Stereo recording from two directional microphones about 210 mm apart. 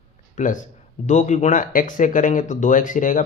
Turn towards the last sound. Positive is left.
turn(degrees=40)  # may be behind; listen again after turning